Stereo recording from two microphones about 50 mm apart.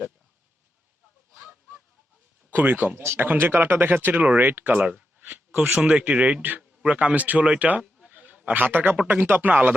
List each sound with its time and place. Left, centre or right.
2.5 s speech: right
4.8 s speech: right
5.6 s speech: right
8.0 s a sound: right
8.5 s speech: right